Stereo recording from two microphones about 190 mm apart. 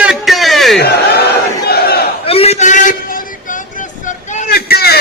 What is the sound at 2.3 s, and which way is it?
Battle cry, 35° left (ahead or behind).